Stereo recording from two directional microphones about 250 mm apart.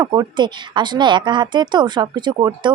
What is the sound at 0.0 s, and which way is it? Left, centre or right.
A woman's voice, centre.